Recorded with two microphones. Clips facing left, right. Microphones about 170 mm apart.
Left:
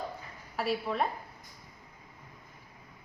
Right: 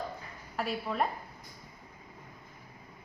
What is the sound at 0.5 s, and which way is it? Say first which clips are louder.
Speech: left 2 dB; centre (ahead or behind).